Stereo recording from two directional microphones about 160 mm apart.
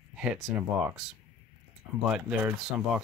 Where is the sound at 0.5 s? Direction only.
5° right (ahead or behind).